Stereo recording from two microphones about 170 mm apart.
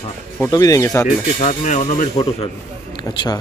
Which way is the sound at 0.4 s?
20° left (ahead or behind).